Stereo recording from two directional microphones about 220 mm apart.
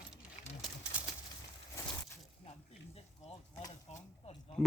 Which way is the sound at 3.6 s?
15° left (ahead or behind).